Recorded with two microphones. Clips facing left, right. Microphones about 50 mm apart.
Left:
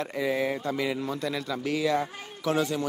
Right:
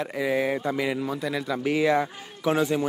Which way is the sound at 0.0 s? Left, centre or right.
Centre.